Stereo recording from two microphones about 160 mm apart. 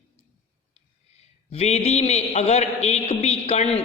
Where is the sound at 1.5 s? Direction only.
40° left (ahead or behind).